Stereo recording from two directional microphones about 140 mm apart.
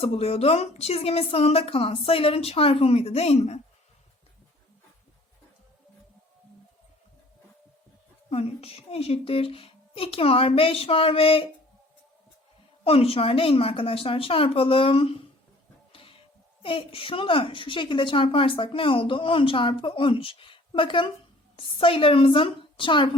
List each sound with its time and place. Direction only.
0.0 s a woman's voice: 45° left (ahead or behind)
8.3 s a woman's voice: 45° left (ahead or behind)
12.8 s a woman's voice: 45° left (ahead or behind)
15.9 s printer: 40° left (ahead or behind)
16.6 s a woman's voice: 40° left (ahead or behind)